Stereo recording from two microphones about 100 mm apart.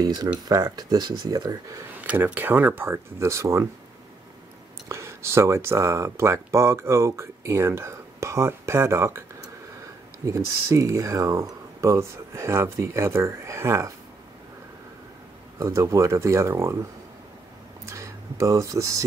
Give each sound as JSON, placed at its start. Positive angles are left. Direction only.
{"t": 0.0, "sound": "speech", "side_deg": -45}
{"t": 2.0, "sound": "speech", "side_deg": -15}
{"t": 4.8, "sound": "speech", "side_deg": -30}
{"t": 15.6, "sound": "speech", "side_deg": -30}
{"t": 17.8, "sound": "speech", "side_deg": -30}